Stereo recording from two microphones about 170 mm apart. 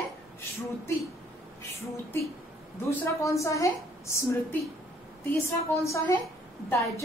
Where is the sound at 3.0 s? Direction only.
20° left (ahead or behind).